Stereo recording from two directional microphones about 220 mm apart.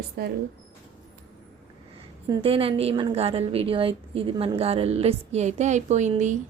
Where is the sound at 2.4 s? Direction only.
25° right (ahead or behind).